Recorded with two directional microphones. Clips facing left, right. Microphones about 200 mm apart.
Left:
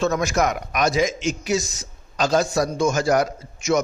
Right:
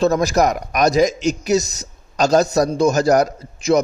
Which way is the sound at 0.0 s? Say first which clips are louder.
Right 5 dB; 35° right (ahead or behind).